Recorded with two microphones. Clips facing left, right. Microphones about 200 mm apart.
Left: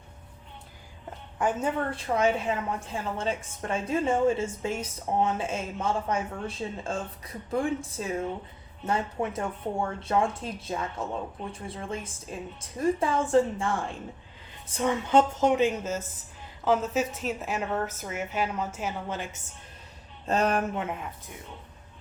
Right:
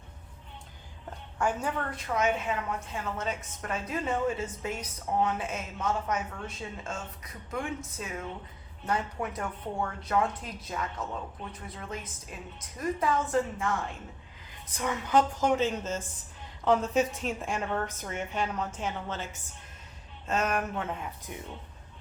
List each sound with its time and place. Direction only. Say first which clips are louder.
1.4 s a woman's voice: left 3 dB; 20° left (ahead or behind)
20.2 s speech: left 4 dB; 35° left (ahead or behind)